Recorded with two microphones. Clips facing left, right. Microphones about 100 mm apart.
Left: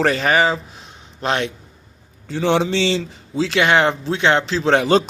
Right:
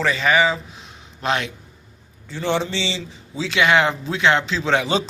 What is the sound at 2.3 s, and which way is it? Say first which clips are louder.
Speech: left 5 dB; 75° left (ahead or behind).